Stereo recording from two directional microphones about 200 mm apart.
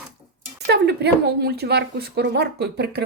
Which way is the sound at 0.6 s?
60° right (ahead or behind).